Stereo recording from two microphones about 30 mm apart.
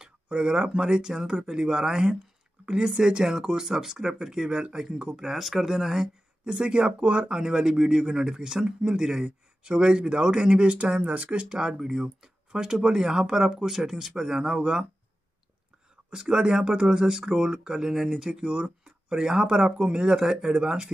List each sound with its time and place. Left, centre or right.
0.4 s speech: right
2.6 s speech: right
3.3 s speech: centre
5.2 s speech: centre
6.4 s speech: right
11.1 s speech: right
11.4 s speech: right
11.8 s speech: centre
16.1 s speech: right
18.5 s speech: right